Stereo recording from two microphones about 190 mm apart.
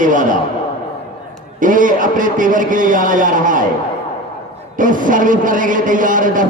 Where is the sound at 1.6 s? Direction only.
45° right (ahead or behind).